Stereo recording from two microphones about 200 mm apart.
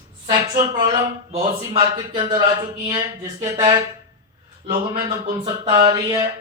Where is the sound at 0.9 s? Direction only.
30° right (ahead or behind).